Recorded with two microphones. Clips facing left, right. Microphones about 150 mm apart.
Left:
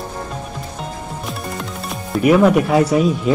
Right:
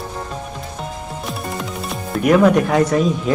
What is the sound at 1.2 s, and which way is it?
Music, centre (ahead or behind).